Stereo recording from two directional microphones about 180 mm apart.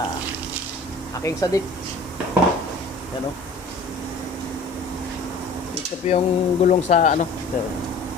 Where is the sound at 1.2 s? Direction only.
15° left (ahead or behind).